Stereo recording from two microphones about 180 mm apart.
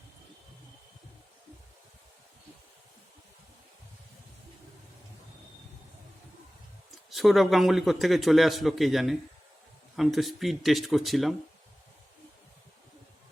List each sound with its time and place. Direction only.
7.1 s a man's voice: centre (ahead or behind)